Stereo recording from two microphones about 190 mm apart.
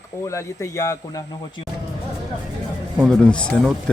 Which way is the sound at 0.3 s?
15° left (ahead or behind).